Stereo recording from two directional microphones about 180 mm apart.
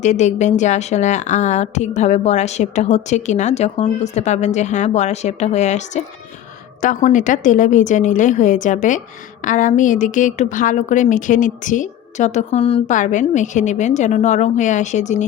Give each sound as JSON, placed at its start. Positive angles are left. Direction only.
{"t": 0.0, "sound": "a woman's voice", "side_deg": 40}
{"t": 12.9, "sound": "a woman's voice", "side_deg": 45}